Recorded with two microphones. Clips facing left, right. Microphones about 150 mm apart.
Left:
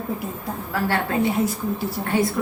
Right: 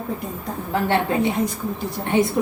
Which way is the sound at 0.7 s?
25° right (ahead or behind).